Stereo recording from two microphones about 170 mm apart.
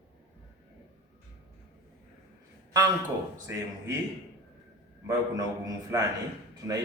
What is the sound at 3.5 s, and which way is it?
Speech, 15° right (ahead or behind).